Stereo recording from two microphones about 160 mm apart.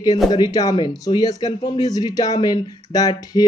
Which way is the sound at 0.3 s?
25° left (ahead or behind).